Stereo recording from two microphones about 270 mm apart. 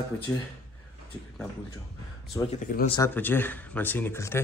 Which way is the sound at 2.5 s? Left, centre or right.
Left.